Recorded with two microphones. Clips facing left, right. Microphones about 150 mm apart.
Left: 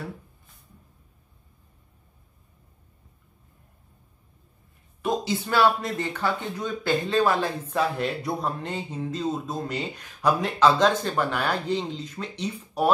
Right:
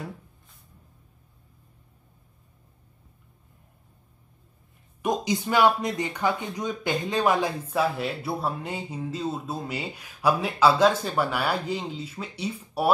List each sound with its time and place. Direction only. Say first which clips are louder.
5.0 s speech: right 1 dB; 15° right (ahead or behind)
7.7 s speech: left 1 dB; 5° right (ahead or behind)